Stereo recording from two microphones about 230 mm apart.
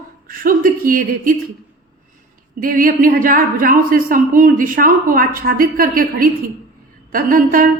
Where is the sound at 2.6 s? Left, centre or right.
Right.